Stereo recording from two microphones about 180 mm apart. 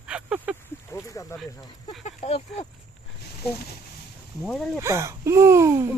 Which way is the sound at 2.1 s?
35° left (ahead or behind).